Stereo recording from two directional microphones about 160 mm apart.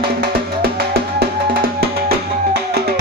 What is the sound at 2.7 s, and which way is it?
Music, 85° right.